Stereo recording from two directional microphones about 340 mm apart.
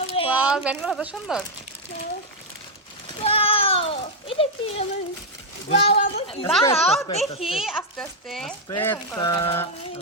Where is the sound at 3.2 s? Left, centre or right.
Centre.